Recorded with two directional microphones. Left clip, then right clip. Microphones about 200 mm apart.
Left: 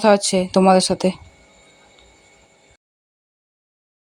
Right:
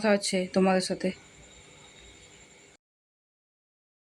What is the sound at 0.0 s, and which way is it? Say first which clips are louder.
Speech: left 11 dB; 25° left (ahead or behind).